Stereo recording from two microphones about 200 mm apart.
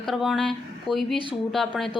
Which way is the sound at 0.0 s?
Centre (ahead or behind).